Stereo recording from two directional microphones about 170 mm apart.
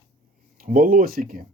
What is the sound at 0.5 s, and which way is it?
Speech, 55° right (ahead or behind).